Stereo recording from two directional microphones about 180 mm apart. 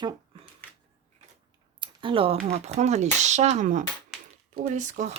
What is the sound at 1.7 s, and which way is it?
Speech, 30° right (ahead or behind).